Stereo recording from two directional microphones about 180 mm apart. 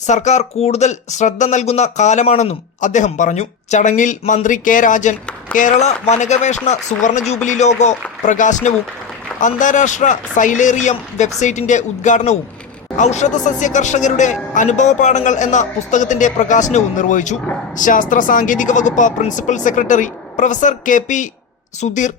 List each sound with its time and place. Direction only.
0.0 s speech: 40° left (ahead or behind)